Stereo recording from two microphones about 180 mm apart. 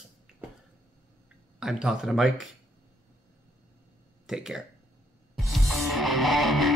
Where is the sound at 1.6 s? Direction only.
5° right (ahead or behind).